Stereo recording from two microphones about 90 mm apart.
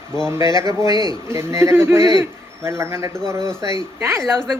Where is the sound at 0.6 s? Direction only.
45° right (ahead or behind).